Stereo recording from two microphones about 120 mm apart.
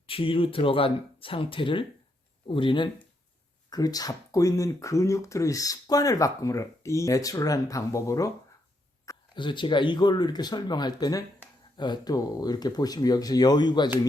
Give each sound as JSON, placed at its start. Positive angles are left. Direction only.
{"t": 0.1, "sound": "speech", "side_deg": 50}
{"t": 3.7, "sound": "speech", "side_deg": 30}
{"t": 9.3, "sound": "speech", "side_deg": 40}